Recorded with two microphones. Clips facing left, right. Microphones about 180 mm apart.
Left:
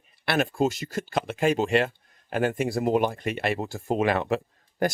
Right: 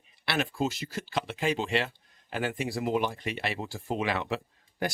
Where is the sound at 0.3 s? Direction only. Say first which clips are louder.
Left 6 dB; 50° left (ahead or behind).